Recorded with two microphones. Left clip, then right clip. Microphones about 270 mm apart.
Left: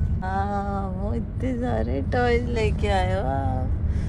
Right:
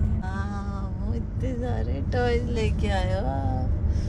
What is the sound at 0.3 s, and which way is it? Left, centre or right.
Vehicle, centre.